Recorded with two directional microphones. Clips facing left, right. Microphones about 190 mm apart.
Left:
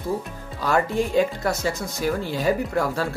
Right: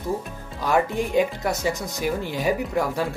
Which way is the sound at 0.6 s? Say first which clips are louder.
Even; 15° right (ahead or behind).